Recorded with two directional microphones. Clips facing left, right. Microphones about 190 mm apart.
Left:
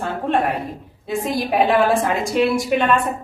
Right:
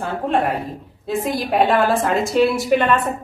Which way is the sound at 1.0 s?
Centre (ahead or behind).